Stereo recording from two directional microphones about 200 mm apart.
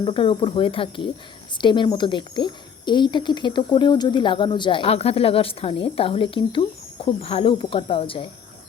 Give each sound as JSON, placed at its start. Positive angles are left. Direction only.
{"t": 0.0, "sound": "speech", "side_deg": 25}